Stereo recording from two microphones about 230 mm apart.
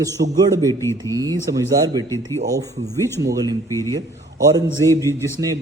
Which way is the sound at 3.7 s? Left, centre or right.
Centre.